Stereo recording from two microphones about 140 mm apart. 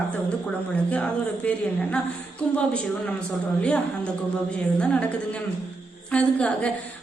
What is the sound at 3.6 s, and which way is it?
Speech, 10° left (ahead or behind).